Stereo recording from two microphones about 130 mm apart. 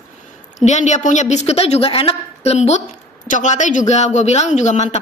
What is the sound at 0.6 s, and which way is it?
A man's voice, 65° left (ahead or behind).